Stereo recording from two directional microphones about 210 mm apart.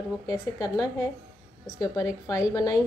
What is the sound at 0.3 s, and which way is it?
A woman's voice, 15° left (ahead or behind).